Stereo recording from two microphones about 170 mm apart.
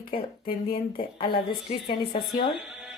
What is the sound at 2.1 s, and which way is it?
Speech, 35° left (ahead or behind).